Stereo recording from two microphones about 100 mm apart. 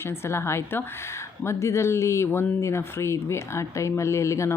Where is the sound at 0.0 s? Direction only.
25° left (ahead or behind).